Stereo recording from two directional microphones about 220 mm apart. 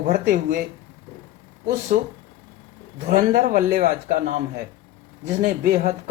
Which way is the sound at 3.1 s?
40° right (ahead or behind).